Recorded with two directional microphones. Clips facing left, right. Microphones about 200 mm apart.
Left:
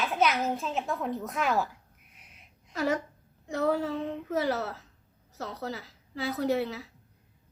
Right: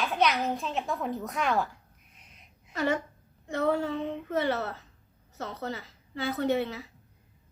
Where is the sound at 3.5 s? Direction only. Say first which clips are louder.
Even; centre (ahead or behind).